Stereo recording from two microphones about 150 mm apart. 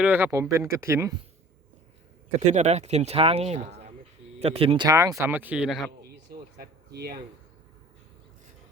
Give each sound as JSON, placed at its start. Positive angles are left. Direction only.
{"t": 0.0, "sound": "speech", "side_deg": -15}
{"t": 2.5, "sound": "speech", "side_deg": -50}
{"t": 4.9, "sound": "speech", "side_deg": -20}
{"t": 6.6, "sound": "speech", "side_deg": -90}